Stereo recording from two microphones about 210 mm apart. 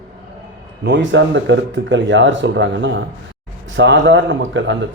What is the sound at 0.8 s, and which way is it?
Speech, 60° right (ahead or behind).